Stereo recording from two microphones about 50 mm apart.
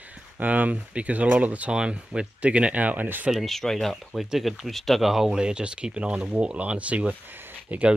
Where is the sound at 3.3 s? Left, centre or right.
Centre.